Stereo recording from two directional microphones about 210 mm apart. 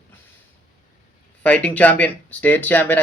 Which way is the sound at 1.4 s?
5° left (ahead or behind).